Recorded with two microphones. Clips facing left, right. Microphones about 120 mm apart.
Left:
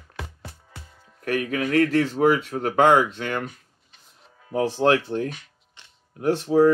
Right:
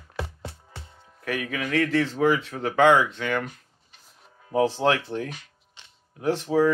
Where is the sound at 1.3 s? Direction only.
40° left (ahead or behind).